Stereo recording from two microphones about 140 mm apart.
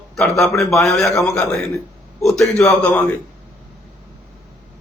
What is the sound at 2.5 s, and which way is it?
Speech, 5° left (ahead or behind).